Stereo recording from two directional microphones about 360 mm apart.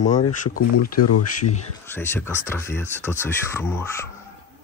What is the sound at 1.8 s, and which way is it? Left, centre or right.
Speech, centre.